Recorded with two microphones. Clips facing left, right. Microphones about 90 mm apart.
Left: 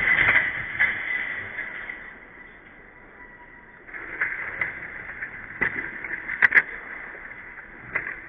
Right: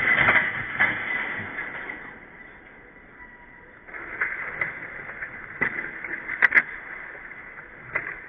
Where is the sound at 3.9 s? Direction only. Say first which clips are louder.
Even; centre (ahead or behind).